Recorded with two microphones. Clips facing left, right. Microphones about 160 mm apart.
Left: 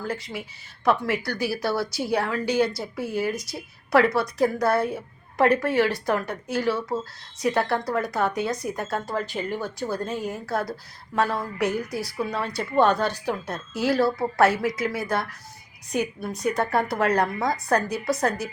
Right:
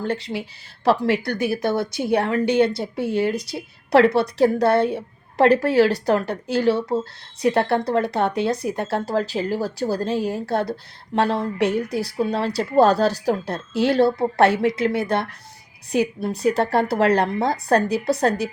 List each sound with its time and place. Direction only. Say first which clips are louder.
0.0 s a woman's voice: right 6 dB; 30° right (ahead or behind)